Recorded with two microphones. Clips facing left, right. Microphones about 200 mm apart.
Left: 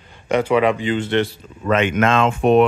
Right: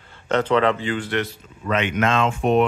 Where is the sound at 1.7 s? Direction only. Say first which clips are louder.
Left 4 dB; 45° left (ahead or behind); by 2.6 s 65° left (ahead or behind).